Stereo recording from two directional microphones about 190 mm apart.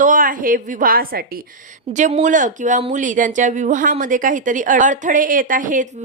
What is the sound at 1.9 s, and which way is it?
Speech, 40° right (ahead or behind).